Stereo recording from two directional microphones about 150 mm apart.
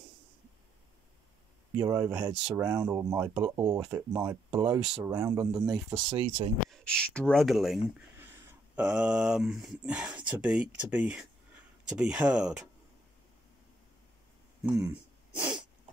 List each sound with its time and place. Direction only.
1.8 s speech: 20° right (ahead or behind)
5.7 s speech: 5° right (ahead or behind)
8.2 s speech: 10° right (ahead or behind)
14.6 s throat clearing: 15° right (ahead or behind)